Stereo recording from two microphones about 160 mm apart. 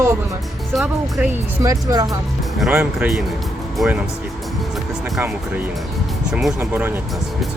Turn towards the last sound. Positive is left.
turn(degrees=0)  # may be behind; listen again after turning